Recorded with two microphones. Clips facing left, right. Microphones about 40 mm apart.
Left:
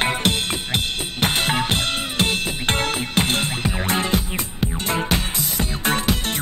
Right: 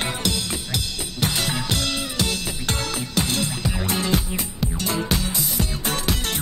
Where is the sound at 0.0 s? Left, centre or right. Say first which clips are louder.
Left 5 dB; left.